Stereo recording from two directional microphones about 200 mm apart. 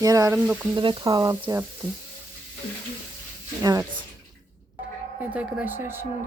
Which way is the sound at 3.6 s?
15° right (ahead or behind).